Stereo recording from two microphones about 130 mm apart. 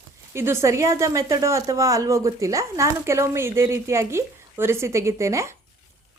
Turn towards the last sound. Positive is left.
turn(degrees=-20)  # may be behind; listen again after turning